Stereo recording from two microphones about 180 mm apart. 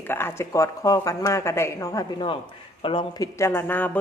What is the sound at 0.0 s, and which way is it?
Speech, 10° left (ahead or behind).